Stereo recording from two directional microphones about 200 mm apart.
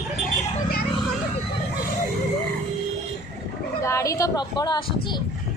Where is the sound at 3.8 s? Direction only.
15° left (ahead or behind).